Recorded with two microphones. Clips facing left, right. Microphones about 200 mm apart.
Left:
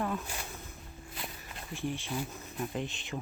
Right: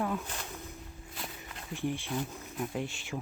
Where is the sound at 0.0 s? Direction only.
5° right (ahead or behind).